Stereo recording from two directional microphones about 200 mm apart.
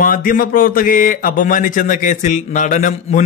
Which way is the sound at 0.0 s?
45° left (ahead or behind).